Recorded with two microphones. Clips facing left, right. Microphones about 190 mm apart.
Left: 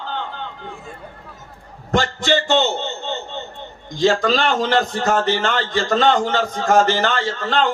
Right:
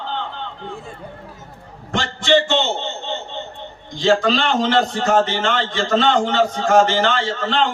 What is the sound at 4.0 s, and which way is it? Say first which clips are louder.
A man's voice: even; 40° left (ahead or behind).